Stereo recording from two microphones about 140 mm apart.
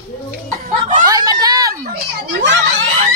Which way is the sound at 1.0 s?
25° right (ahead or behind).